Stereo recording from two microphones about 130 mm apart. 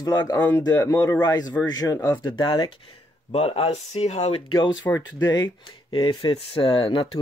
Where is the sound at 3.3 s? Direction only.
50° left (ahead or behind).